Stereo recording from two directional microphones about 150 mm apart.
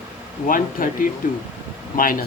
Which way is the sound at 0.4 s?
65° left (ahead or behind).